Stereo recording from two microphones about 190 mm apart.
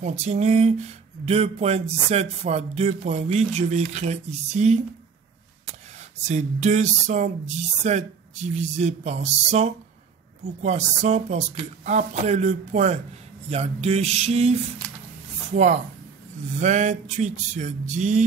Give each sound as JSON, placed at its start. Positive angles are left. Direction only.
{"t": 0.0, "sound": "speech", "side_deg": -35}
{"t": 5.9, "sound": "speech", "side_deg": -35}